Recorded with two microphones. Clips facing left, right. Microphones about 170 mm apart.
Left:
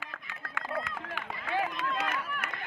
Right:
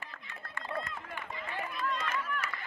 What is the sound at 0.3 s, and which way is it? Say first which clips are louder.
Run: left 3 dB; 90° left.